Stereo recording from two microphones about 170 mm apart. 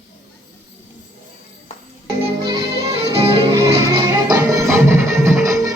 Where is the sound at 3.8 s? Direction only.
20° right (ahead or behind).